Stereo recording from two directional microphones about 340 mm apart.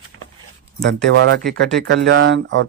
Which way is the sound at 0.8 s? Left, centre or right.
Right.